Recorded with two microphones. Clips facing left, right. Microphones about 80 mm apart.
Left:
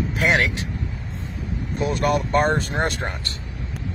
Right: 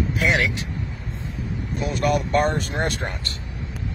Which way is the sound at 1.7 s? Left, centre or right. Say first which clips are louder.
Left 1 dB; left.